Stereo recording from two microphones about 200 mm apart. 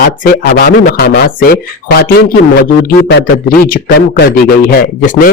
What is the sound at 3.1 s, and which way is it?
Speech, 65° left (ahead or behind).